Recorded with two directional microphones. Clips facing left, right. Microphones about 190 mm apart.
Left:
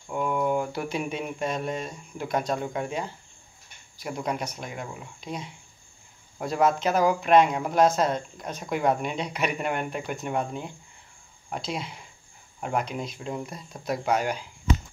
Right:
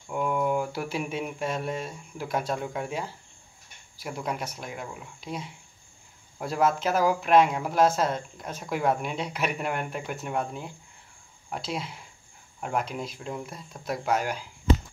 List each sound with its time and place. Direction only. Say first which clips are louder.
0.1 s speech: left 1 dB; 5° right (ahead or behind)